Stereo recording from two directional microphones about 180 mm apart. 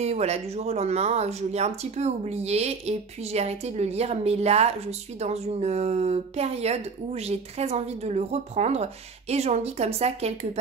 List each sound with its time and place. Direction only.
0.0 s speech: 35° right (ahead or behind)